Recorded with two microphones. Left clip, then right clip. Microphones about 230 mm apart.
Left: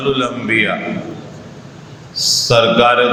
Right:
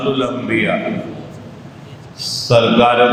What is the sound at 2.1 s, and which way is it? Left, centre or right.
Speech, left.